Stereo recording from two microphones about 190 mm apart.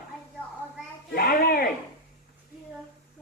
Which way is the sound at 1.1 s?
55° left (ahead or behind).